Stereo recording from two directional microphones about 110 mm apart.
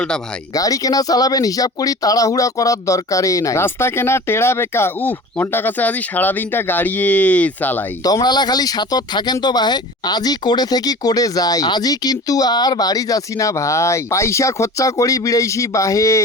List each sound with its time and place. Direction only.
0.5 s speech: 35° left (ahead or behind); by 7.9 s 15° left (ahead or behind)
8.0 s speech: 35° left (ahead or behind)